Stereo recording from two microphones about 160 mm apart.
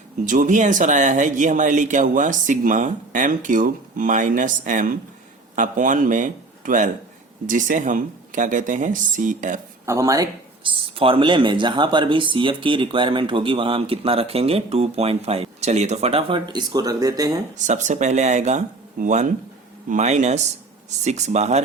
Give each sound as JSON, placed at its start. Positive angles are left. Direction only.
{"t": 0.3, "sound": "a man's voice", "side_deg": -50}
{"t": 9.8, "sound": "speech", "side_deg": -20}
{"t": 10.6, "sound": "speech", "side_deg": -35}
{"t": 17.7, "sound": "speech", "side_deg": -50}